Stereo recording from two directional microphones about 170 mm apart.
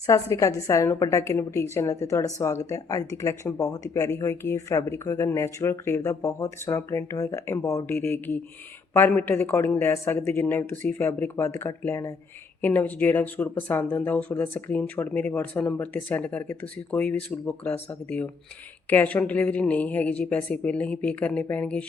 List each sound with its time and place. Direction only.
0.0 s a woman's voice: 20° left (ahead or behind)